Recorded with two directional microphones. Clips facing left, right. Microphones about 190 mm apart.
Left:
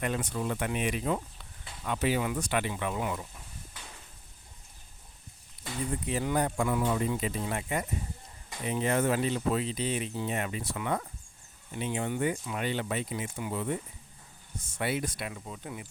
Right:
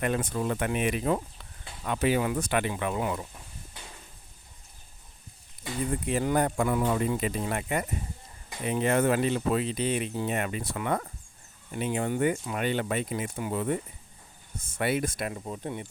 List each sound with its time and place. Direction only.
0.0 s speech: 55° right (ahead or behind)
6.1 s speech: 55° right (ahead or behind); by 15.9 s 30° right (ahead or behind)